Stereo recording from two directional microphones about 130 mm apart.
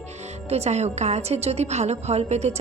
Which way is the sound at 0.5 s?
55° right (ahead or behind).